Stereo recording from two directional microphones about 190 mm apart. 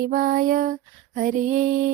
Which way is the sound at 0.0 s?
50° right (ahead or behind).